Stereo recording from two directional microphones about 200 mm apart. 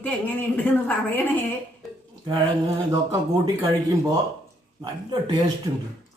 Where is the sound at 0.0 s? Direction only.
10° left (ahead or behind).